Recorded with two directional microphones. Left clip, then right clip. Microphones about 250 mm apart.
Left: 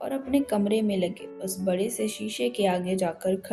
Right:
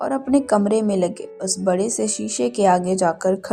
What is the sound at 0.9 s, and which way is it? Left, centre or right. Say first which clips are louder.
Speech: right 7 dB; right.